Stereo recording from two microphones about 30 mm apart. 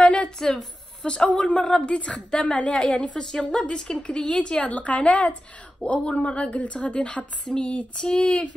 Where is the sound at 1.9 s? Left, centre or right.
Left.